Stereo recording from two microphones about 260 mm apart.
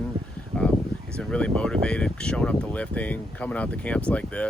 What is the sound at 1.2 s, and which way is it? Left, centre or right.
Speech, centre.